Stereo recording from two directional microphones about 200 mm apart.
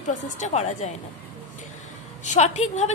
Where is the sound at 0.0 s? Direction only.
40° left (ahead or behind).